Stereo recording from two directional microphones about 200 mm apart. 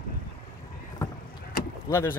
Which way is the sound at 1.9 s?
20° left (ahead or behind).